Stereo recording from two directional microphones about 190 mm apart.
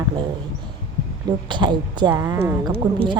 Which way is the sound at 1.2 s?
25° right (ahead or behind).